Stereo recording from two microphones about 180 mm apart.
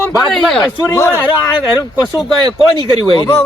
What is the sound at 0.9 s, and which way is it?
Speech, 15° left (ahead or behind).